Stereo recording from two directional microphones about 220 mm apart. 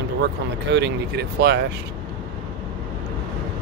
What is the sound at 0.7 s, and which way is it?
Speech, 50° right (ahead or behind).